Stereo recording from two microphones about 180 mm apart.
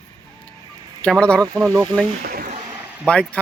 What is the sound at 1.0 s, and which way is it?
Speech, 5° left (ahead or behind).